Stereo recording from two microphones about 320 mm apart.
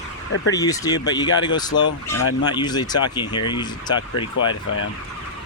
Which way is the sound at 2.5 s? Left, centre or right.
Centre.